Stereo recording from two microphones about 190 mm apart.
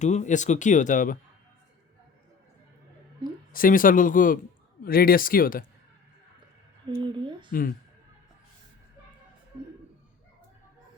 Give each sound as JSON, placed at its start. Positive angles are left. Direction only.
{"t": 0.0, "sound": "speech", "side_deg": 40}
{"t": 3.5, "sound": "speech", "side_deg": 45}
{"t": 7.0, "sound": "speech", "side_deg": -25}